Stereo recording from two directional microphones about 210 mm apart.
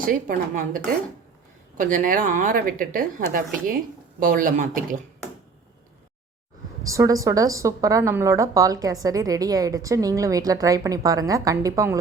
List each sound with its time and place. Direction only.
0.0 s speech: 40° right (ahead or behind)
6.8 s a woman's voice: 15° right (ahead or behind)